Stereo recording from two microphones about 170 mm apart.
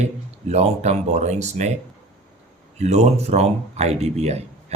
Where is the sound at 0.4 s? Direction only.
40° right (ahead or behind).